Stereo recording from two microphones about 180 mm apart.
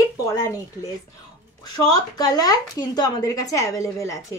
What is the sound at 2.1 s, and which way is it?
A woman's voice, 20° left (ahead or behind).